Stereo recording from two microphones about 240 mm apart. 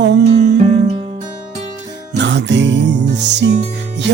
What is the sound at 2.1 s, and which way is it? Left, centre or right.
Music, right.